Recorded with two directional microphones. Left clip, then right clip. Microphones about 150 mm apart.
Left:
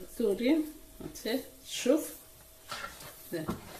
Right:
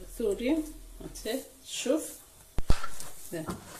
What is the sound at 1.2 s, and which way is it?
Speech, 35° left (ahead or behind).